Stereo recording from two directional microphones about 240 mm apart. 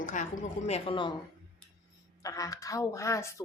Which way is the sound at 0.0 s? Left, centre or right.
Left.